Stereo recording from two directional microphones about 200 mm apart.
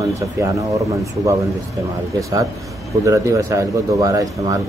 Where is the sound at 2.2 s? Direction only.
20° right (ahead or behind).